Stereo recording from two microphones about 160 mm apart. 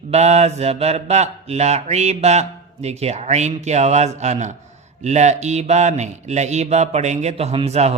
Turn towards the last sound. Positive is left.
turn(degrees=-40)  # may be behind; listen again after turning